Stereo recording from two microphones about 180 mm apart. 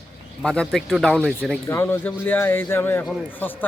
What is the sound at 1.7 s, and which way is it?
A man's voice, 15° left (ahead or behind).